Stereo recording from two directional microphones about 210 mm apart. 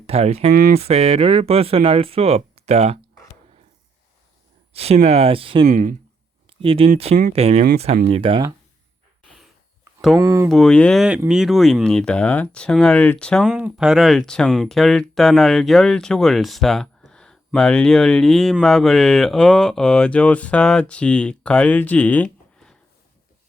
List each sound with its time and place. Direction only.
0.1 s speech: 30° right (ahead or behind)
0.5 s speech: 45° right (ahead or behind)
0.8 s speech: 30° right (ahead or behind)
4.7 s speech: 30° right (ahead or behind)
5.7 s speech: 40° right (ahead or behind)
6.5 s speech: 25° right (ahead or behind)
10.2 s speech: 15° right (ahead or behind)
10.5 s speech: 5° left (ahead or behind)